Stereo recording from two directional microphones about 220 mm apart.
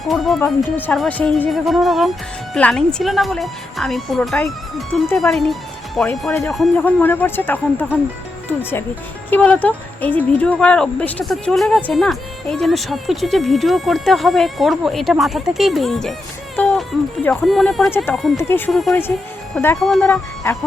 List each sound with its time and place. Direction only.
0.1 s speech: centre (ahead or behind)
9.3 s speech: 5° left (ahead or behind)